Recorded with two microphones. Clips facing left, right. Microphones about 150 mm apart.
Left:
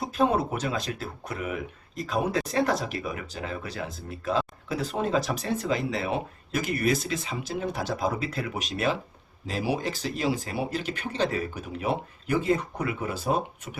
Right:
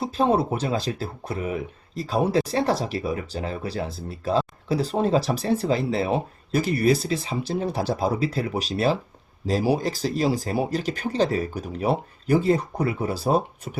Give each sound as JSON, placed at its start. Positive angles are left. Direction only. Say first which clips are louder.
{"t": 0.0, "sound": "speech", "louder": "right 3 dB", "side_deg": -30}